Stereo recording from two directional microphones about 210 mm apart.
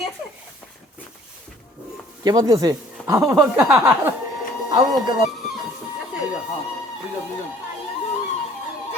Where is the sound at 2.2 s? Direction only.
15° right (ahead or behind).